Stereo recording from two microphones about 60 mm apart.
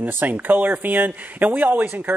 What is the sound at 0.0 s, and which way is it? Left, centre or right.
Speech, right.